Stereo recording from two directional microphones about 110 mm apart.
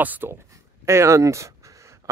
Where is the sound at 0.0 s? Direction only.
15° right (ahead or behind).